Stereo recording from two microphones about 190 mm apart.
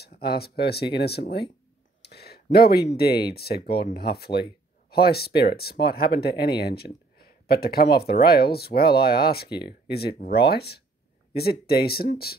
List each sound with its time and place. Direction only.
0.0 s speech: 55° left (ahead or behind)
2.0 s a sound: 60° left (ahead or behind)
3.0 s speech: 55° left (ahead or behind)